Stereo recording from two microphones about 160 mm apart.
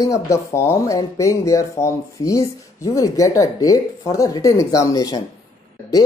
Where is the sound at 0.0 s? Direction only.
20° left (ahead or behind).